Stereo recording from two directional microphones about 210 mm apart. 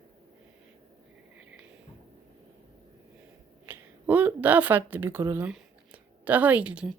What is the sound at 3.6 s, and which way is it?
Speech, 5° right (ahead or behind).